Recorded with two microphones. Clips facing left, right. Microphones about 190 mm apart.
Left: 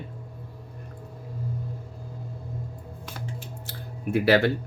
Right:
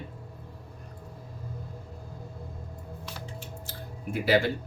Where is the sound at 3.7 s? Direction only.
65° left (ahead or behind).